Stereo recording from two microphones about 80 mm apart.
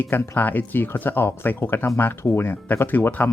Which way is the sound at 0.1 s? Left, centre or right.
Left.